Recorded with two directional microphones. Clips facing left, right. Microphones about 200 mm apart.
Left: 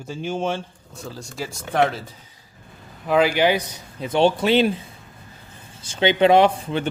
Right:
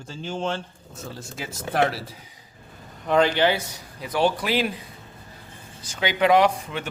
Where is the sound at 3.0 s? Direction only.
5° left (ahead or behind); by 4.7 s 25° left (ahead or behind).